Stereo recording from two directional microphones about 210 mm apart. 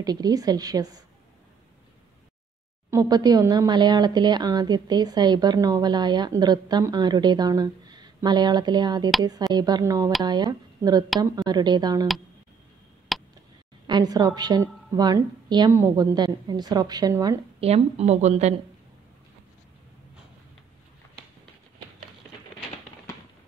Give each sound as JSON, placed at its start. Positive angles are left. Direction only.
{"t": 0.0, "sound": "a woman's voice", "side_deg": -20}
{"t": 2.9, "sound": "a woman's voice", "side_deg": -15}
{"t": 13.1, "sound": "tick", "side_deg": 0}
{"t": 13.8, "sound": "speech", "side_deg": -20}
{"t": 17.6, "sound": "a woman's voice", "side_deg": -30}